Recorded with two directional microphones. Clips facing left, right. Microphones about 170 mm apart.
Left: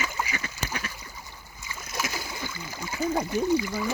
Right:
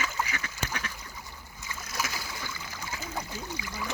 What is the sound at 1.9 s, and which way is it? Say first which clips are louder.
Splash: left 3 dB; 20° left (ahead or behind).